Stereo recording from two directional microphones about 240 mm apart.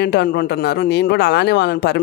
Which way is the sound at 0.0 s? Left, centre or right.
Left.